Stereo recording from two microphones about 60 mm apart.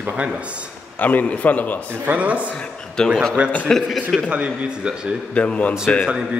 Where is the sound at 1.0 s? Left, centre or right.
Left.